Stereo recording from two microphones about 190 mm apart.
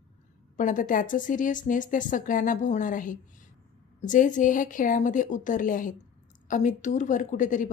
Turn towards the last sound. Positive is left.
turn(degrees=40)  # may be behind; listen again after turning